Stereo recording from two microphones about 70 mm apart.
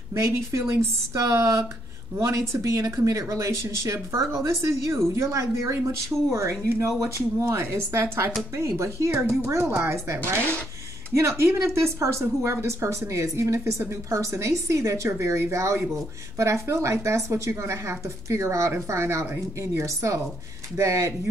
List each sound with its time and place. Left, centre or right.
0.1 s a woman's voice: right
6.1 s speech: right
6.6 s a woman's voice: right